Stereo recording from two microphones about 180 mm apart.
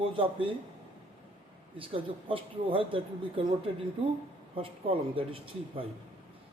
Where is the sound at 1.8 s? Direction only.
30° right (ahead or behind).